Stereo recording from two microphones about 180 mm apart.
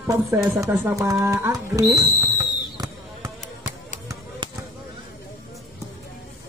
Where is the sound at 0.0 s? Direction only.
15° right (ahead or behind).